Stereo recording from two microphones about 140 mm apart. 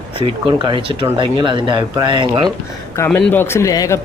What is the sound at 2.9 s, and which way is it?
Speech, 15° left (ahead or behind).